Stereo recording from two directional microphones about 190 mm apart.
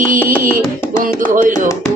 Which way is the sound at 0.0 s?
45° right (ahead or behind).